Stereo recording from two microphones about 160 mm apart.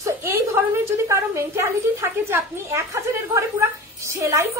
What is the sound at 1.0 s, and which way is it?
A woman's voice, 15° right (ahead or behind).